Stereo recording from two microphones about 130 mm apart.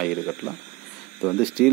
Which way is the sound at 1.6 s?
Centre (ahead or behind).